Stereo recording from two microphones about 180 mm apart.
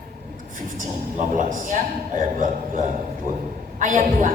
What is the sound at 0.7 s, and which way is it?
A woman's voice, 45° right (ahead or behind).